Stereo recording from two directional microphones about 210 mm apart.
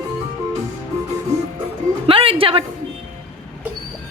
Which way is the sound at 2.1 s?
25° right (ahead or behind).